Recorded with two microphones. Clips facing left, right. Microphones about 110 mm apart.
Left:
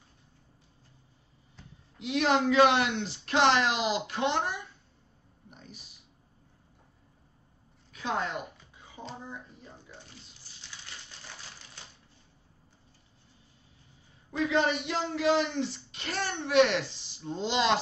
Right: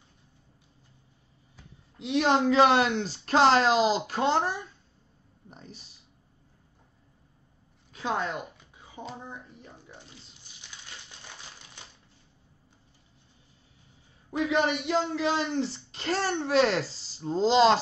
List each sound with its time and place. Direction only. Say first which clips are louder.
2.0 s a child's voice: right 2 dB; 30° right (ahead or behind)
7.9 s a sound: right 2 dB; 30° right (ahead or behind)
14.3 s a man's voice: right 1 dB; 15° right (ahead or behind)
14.9 s a child's voice: right 1 dB; 25° right (ahead or behind)